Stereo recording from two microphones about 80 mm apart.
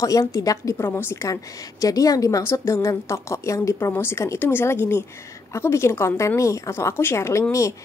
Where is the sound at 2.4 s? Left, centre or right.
Left.